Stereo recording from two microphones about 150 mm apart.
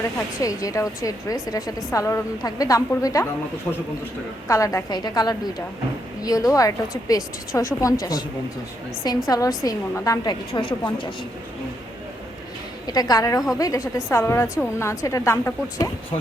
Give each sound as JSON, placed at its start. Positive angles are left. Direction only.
{"t": 0.4, "sound": "a woman's voice", "side_deg": 20}
{"t": 4.4, "sound": "a woman's voice", "side_deg": 20}
{"t": 9.0, "sound": "a woman's voice", "side_deg": 25}
{"t": 10.5, "sound": "a woman's voice", "side_deg": 35}
{"t": 12.9, "sound": "a woman's voice", "side_deg": 25}